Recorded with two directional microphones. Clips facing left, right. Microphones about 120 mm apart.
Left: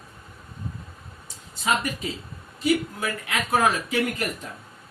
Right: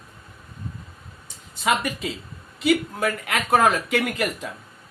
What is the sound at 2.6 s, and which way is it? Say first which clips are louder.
Speech: right 3 dB; 60° right (ahead or behind).